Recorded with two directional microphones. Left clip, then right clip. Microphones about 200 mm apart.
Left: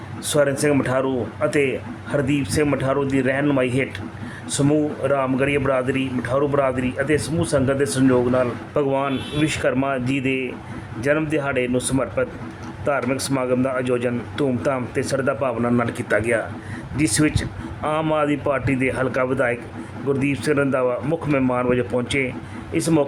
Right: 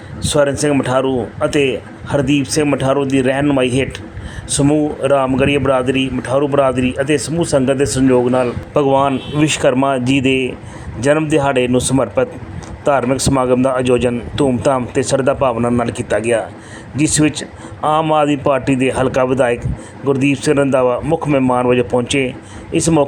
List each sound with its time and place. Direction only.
0.2 s a man's voice: 10° right (ahead or behind)